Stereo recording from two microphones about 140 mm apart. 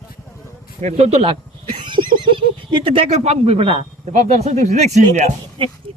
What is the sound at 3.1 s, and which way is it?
Speech, 50° right (ahead or behind).